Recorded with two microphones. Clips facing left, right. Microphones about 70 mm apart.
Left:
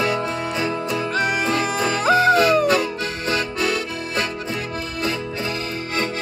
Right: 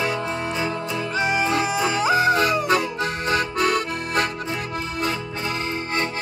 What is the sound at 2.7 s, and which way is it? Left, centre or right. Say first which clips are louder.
Accordion: left 1 dB; right.